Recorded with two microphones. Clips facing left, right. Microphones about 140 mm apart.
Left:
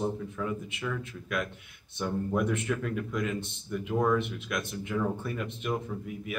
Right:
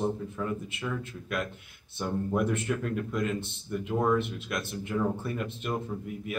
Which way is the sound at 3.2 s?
Centre (ahead or behind).